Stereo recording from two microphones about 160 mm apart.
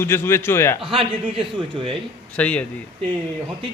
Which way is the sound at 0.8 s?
35° right (ahead or behind).